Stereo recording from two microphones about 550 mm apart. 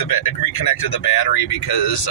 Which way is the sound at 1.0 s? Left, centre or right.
Left.